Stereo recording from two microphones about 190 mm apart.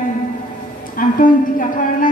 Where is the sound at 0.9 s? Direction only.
45° left (ahead or behind).